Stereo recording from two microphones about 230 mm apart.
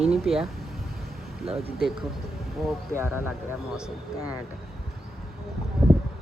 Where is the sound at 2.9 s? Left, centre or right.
Centre.